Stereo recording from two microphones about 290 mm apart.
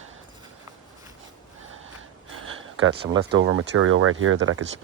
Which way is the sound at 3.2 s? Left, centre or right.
Right.